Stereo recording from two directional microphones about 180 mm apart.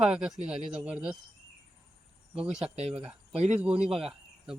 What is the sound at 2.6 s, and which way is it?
Speech, 35° right (ahead or behind).